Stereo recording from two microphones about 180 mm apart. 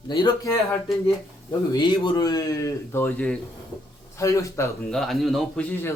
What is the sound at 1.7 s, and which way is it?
A man's voice, 25° left (ahead or behind).